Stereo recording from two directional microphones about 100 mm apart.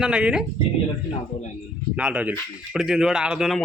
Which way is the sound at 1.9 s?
10° right (ahead or behind).